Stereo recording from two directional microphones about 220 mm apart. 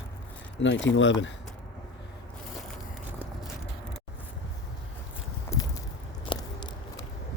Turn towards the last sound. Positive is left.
turn(degrees=20)  # may be behind; listen again after turning